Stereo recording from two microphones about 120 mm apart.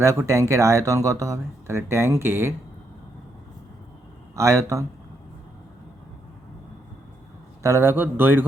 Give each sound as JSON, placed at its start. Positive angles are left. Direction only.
{"t": 0.0, "sound": "speech", "side_deg": -25}
{"t": 4.4, "sound": "speech", "side_deg": -25}
{"t": 7.6, "sound": "speech", "side_deg": -20}